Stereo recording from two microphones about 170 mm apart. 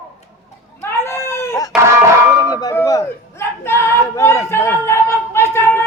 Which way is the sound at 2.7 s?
20° left (ahead or behind).